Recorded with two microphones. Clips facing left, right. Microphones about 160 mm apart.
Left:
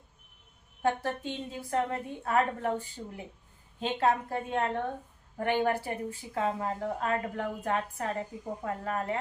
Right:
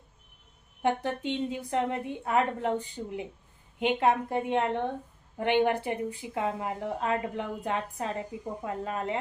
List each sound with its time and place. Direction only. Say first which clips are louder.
0.8 s a woman's voice: right 1 dB; 20° right (ahead or behind)